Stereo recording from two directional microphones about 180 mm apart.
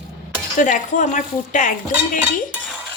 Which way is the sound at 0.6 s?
45° left (ahead or behind).